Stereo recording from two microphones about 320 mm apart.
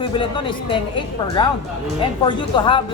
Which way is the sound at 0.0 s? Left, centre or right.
Centre.